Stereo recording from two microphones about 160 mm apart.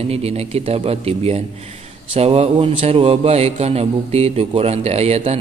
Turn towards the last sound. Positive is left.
turn(degrees=-40)  # may be behind; listen again after turning